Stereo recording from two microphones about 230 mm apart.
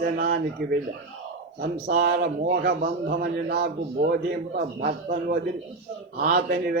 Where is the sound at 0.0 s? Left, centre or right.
Right.